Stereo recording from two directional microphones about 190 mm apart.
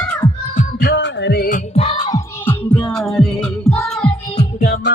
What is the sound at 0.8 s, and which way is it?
Music, 65° left (ahead or behind).